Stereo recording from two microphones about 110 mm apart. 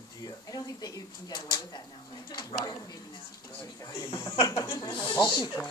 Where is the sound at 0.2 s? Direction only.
35° left (ahead or behind).